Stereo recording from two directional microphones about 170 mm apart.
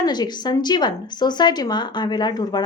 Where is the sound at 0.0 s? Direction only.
25° left (ahead or behind).